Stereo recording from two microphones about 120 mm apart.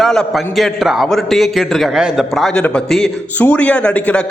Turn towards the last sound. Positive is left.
turn(degrees=10)  # may be behind; listen again after turning